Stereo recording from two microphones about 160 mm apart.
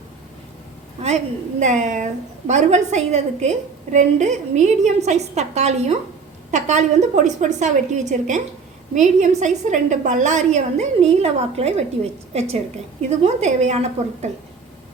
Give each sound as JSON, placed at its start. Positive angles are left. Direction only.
{"t": 1.0, "sound": "a woman's voice", "side_deg": -45}